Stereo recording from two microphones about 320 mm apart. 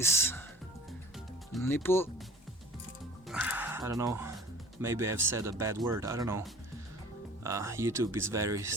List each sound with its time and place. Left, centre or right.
0.0 s speech: centre
1.5 s speech: centre
3.2 s a sound: centre
4.8 s speech: centre